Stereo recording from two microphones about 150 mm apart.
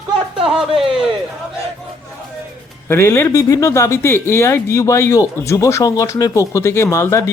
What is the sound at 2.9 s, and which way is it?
Speech, 15° left (ahead or behind).